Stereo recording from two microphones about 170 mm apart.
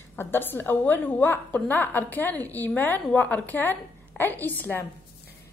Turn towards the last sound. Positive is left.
turn(degrees=10)  # may be behind; listen again after turning